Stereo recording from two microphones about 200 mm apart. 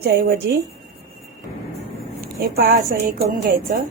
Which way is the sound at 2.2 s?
50° right (ahead or behind).